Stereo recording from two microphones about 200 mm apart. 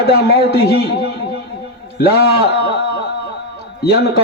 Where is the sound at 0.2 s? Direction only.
50° left (ahead or behind).